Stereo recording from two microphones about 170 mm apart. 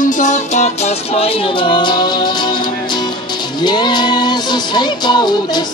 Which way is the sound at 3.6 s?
25° left (ahead or behind).